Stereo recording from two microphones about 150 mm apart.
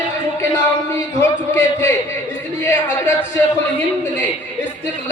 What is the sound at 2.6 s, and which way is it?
Speech, 15° left (ahead or behind).